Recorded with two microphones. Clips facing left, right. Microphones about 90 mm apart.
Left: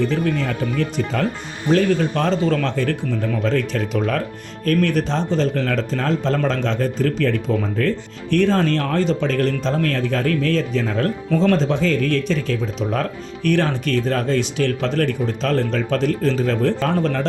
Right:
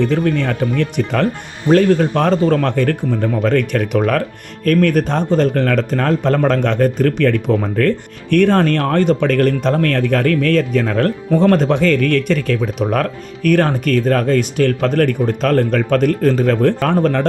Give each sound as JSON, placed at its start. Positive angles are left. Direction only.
{"t": 0.0, "sound": "speech", "side_deg": -60}
{"t": 1.7, "sound": "speech", "side_deg": -50}
{"t": 4.6, "sound": "speech", "side_deg": -50}
{"t": 13.5, "sound": "speech", "side_deg": -50}